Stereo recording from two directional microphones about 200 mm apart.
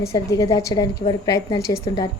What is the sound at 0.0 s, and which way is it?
A woman's voice, 15° left (ahead or behind).